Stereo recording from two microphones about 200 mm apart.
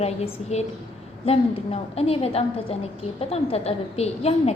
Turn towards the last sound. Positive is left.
turn(degrees=30)  # may be behind; listen again after turning